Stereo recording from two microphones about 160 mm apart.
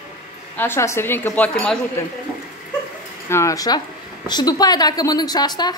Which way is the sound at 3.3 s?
20° left (ahead or behind).